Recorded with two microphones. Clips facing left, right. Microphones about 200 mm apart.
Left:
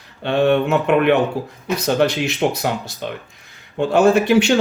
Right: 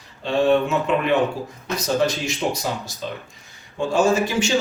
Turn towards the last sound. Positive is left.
turn(degrees=60)  # may be behind; listen again after turning